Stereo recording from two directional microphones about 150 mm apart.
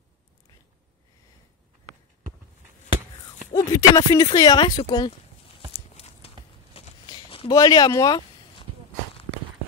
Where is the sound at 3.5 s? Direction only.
20° left (ahead or behind).